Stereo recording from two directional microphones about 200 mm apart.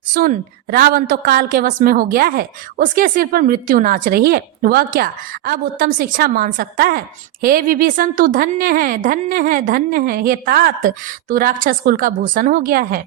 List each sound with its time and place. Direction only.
0.1 s a woman's voice: 50° right (ahead or behind)